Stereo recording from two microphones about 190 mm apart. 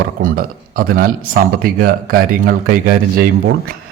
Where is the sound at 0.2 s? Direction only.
50° right (ahead or behind).